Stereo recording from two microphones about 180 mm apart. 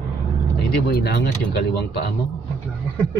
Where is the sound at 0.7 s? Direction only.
65° left (ahead or behind).